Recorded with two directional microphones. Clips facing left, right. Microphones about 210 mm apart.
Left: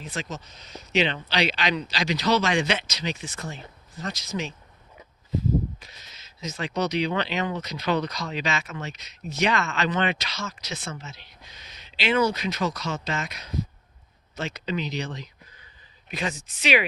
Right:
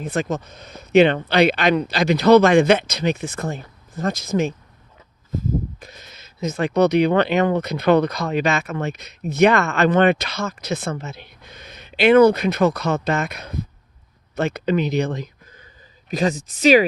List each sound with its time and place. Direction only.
0.0 s speech: 55° right (ahead or behind)
5.8 s speech: 50° right (ahead or behind)